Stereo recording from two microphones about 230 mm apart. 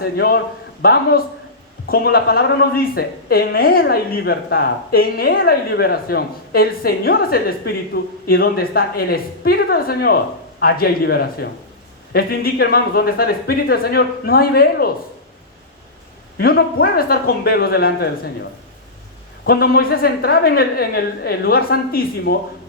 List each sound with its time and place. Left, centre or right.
0.2 s a woman's voice: left
16.4 s a woman's voice: left
19.5 s a woman's voice: left